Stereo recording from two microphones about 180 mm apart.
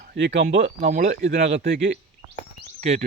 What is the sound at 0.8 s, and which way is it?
Speech, 45° right (ahead or behind).